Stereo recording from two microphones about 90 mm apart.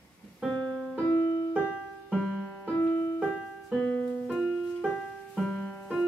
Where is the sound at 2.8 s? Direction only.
15° left (ahead or behind).